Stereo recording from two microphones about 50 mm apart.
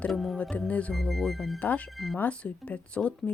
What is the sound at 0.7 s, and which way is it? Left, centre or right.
Speech, left.